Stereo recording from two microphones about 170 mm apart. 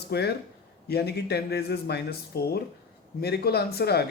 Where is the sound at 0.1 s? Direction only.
75° left (ahead or behind).